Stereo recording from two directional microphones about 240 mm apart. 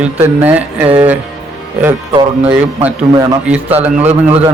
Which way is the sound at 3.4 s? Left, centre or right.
Centre.